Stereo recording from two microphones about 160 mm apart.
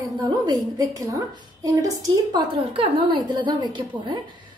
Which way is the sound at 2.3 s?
30° right (ahead or behind).